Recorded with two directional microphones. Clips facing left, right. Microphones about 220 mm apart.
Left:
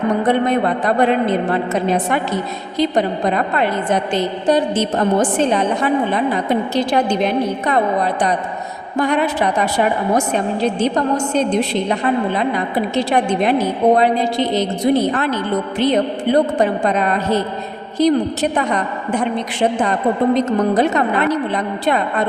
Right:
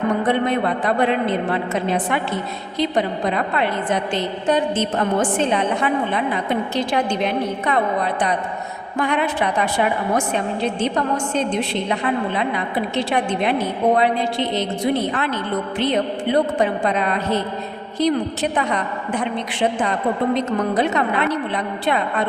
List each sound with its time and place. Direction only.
0.2 s a woman's voice: 40° left (ahead or behind)